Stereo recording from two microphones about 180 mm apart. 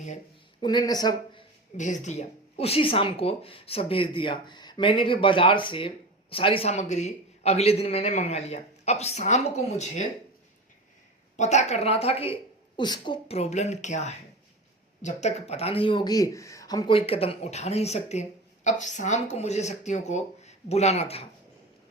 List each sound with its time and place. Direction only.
0.6 s speech: 25° left (ahead or behind)
1.7 s speech: 45° left (ahead or behind)
11.3 s speech: 40° left (ahead or behind)